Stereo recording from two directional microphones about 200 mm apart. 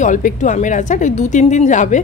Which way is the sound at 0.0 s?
40° left (ahead or behind).